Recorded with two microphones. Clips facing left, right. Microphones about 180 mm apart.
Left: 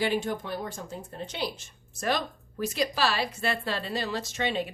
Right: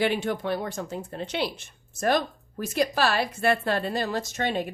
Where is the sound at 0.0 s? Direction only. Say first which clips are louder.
Right 3 dB; 65° right (ahead or behind).